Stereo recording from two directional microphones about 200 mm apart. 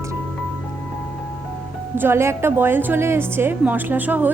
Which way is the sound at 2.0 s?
10° right (ahead or behind).